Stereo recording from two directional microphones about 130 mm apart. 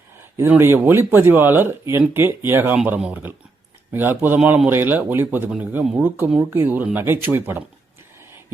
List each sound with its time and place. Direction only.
0.3 s speech: 15° right (ahead or behind)